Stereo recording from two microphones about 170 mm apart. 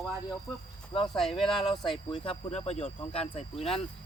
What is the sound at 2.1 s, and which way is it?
Speech, 30° left (ahead or behind).